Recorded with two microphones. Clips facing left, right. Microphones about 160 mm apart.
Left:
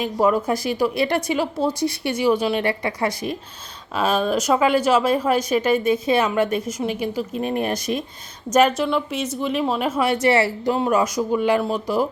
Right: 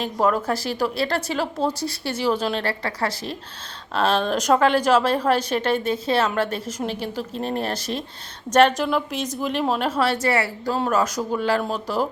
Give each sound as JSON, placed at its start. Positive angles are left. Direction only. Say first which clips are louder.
{"t": 0.0, "sound": "a woman's voice", "louder": "left 2 dB", "side_deg": 10}
{"t": 8.8, "sound": "speech", "louder": "left 1 dB", "side_deg": 0}
{"t": 10.0, "sound": "a woman's voice", "louder": "left 6 dB", "side_deg": 20}
{"t": 10.8, "sound": "a woman's voice", "louder": "left 1 dB", "side_deg": 10}